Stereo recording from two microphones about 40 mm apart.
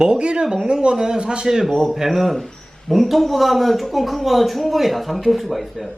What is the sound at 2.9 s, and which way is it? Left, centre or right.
A man's voice, centre.